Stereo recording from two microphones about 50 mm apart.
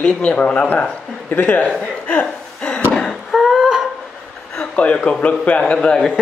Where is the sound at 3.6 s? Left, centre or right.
Centre.